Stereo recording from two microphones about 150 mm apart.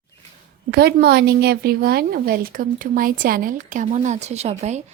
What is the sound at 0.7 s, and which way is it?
A woman's voice, 90° right.